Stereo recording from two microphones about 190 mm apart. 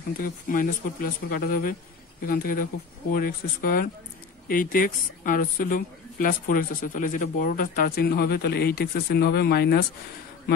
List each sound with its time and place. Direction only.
0.2 s a woman's voice: 45° left (ahead or behind)